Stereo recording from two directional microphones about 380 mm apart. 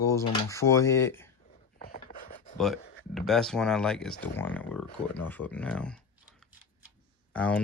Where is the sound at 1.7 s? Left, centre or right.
Left.